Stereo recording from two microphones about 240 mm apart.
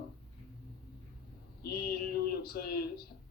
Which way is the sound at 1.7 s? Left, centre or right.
Left.